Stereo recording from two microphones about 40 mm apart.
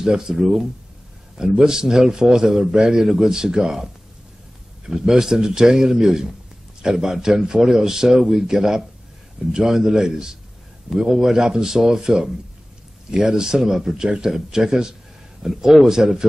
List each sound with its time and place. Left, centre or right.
0.0 s a man's voice: centre